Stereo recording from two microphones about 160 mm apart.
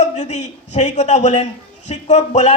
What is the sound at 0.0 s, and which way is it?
A man's voice, 45° left (ahead or behind).